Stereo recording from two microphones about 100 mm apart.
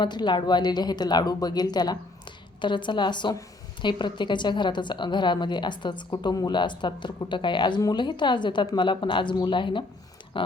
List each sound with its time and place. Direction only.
0.0 s a woman's voice: 50° left (ahead or behind)